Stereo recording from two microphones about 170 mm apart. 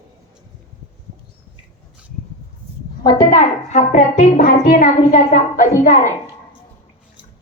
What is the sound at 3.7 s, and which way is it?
Speech, 45° left (ahead or behind).